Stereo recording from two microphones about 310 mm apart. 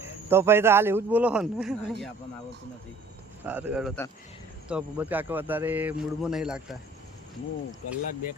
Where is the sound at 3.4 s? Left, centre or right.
Centre.